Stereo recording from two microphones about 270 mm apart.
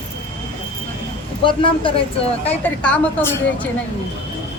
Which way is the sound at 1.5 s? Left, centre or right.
Centre.